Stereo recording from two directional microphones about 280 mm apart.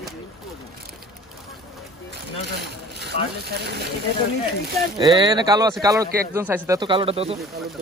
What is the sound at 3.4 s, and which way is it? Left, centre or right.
Speech, right.